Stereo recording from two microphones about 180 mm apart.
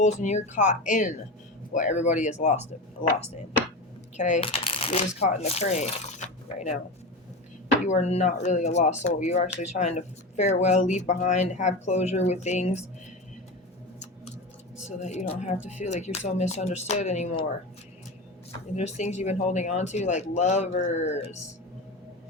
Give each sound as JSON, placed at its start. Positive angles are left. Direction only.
{"t": 0.0, "sound": "speech", "side_deg": 40}
{"t": 4.2, "sound": "speech", "side_deg": 45}
{"t": 4.4, "sound": "speech", "side_deg": 30}
{"t": 7.9, "sound": "speech", "side_deg": 40}
{"t": 14.8, "sound": "speech", "side_deg": 40}
{"t": 18.8, "sound": "speech", "side_deg": 40}